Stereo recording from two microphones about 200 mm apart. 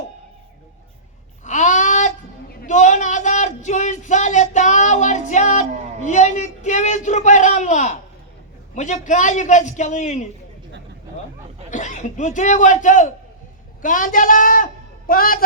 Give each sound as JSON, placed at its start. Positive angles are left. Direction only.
{"t": 1.5, "sound": "a sound", "side_deg": 35}
{"t": 8.7, "sound": "a man's voice", "side_deg": 35}
{"t": 11.7, "sound": "a man's voice", "side_deg": 35}